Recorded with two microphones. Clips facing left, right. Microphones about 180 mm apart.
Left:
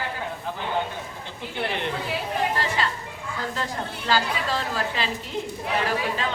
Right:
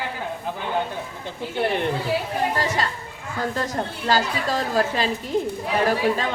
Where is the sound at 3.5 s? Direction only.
40° right (ahead or behind).